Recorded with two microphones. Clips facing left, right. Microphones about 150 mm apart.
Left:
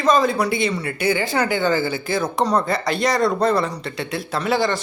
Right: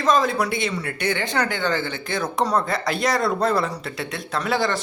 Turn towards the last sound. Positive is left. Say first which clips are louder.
# left 2 dB
turn(degrees=0)  # may be behind; listen again after turning